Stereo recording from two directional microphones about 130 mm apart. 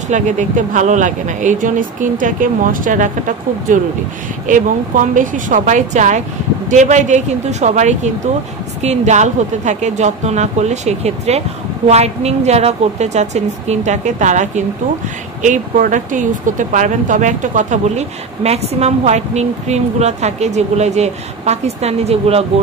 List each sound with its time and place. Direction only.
0.1 s speech: 70° right (ahead or behind); by 22.4 s 50° right (ahead or behind)